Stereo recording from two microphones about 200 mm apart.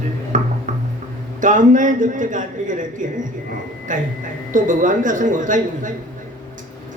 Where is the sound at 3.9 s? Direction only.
40° right (ahead or behind).